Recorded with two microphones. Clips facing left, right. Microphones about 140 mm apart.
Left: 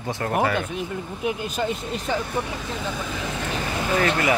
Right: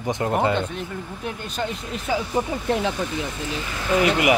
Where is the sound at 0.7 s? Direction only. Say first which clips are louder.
Left 2 dB; 10° left (ahead or behind).